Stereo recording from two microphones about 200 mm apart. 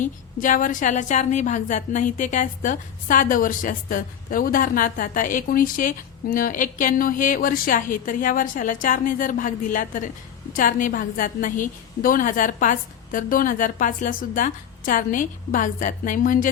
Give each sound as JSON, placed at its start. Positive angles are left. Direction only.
{"t": 0.0, "sound": "a woman's voice", "side_deg": 40}